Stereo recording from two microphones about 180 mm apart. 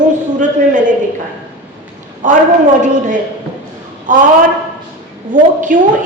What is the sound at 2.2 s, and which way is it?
A woman's voice, 45° right (ahead or behind).